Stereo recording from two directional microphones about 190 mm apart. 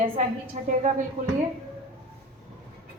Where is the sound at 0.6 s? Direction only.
40° right (ahead or behind).